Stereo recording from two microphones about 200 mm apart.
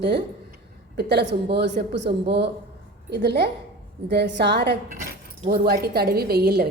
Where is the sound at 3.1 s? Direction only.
55° right (ahead or behind).